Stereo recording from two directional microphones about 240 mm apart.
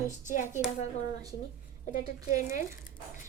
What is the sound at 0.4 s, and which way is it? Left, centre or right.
Speech, centre.